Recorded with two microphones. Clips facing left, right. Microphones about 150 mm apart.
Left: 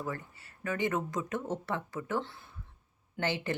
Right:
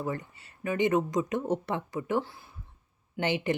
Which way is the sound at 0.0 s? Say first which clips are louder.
Right 4 dB; 20° right (ahead or behind).